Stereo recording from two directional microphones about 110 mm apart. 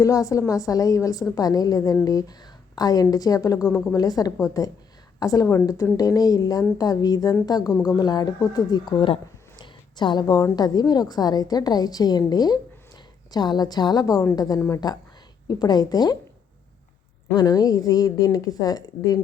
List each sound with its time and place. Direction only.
0.0 s a woman's voice: 30° left (ahead or behind)
3.7 s a woman's voice: 10° left (ahead or behind)
3.9 s a woman's voice: 35° left (ahead or behind)
17.3 s a woman's voice: 35° left (ahead or behind)